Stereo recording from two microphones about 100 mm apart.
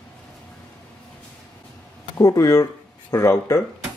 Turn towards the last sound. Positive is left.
turn(degrees=25)  # may be behind; listen again after turning